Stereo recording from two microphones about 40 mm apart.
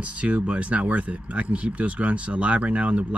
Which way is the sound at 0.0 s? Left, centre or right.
Right.